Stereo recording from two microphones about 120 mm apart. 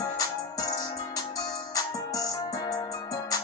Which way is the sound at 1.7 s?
30° left (ahead or behind).